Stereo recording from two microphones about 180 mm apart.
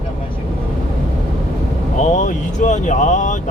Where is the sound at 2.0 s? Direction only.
45° left (ahead or behind).